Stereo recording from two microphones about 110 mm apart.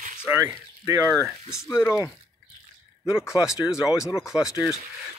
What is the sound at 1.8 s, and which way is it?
Speech, 30° left (ahead or behind).